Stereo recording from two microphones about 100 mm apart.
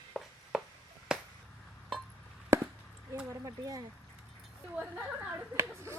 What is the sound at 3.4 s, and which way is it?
Speech, 40° right (ahead or behind).